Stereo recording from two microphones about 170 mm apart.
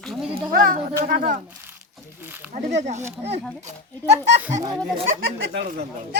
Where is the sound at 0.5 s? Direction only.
55° right (ahead or behind).